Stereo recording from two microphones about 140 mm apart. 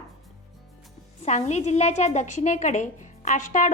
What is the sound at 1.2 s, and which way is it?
A woman's voice, 55° left (ahead or behind).